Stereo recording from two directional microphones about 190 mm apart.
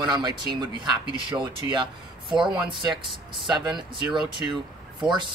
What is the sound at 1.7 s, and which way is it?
Speech, 25° right (ahead or behind).